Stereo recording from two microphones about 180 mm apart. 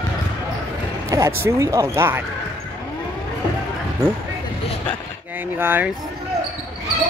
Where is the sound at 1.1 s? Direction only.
15° right (ahead or behind).